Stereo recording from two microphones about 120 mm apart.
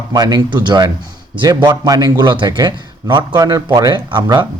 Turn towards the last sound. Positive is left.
turn(degrees=-35)  # may be behind; listen again after turning